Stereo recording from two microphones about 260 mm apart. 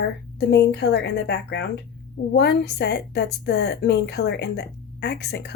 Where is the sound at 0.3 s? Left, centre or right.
Left.